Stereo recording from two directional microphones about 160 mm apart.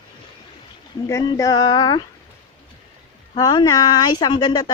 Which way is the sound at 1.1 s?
20° left (ahead or behind).